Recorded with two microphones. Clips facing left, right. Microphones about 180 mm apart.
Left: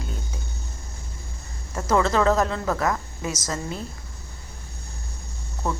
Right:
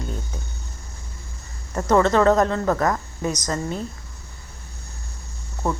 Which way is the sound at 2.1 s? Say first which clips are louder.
Right 4 dB; 35° right (ahead or behind).